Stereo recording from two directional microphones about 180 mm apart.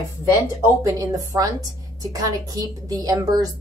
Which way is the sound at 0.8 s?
20° right (ahead or behind).